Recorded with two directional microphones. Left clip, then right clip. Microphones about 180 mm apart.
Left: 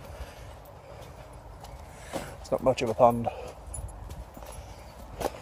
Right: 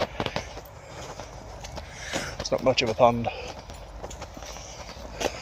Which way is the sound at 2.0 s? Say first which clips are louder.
Right 6 dB; 10° left (ahead or behind).